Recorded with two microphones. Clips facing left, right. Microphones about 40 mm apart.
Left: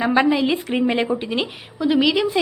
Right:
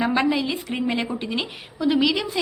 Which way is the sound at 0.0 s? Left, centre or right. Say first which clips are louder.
Left 4 dB; centre.